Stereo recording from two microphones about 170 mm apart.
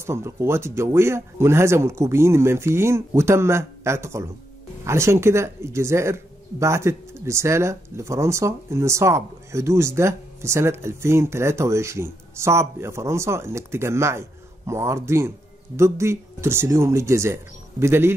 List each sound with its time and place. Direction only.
0.0 s speech: 15° right (ahead or behind)